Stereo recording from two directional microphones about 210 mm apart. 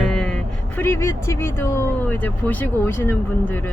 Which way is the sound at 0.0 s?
5° left (ahead or behind).